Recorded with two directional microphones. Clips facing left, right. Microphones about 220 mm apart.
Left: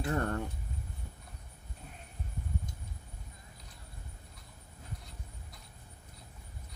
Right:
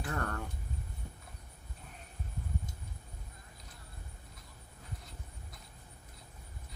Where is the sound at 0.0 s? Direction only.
25° left (ahead or behind).